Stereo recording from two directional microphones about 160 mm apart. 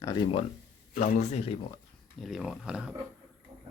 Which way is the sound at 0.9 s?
45° left (ahead or behind).